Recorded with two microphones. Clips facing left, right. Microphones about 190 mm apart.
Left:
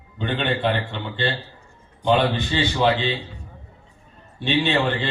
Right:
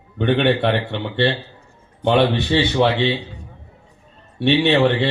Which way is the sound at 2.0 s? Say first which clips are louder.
Right 3 dB; 65° right (ahead or behind).